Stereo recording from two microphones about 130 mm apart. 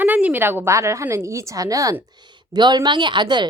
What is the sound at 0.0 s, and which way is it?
A woman's voice, 10° right (ahead or behind).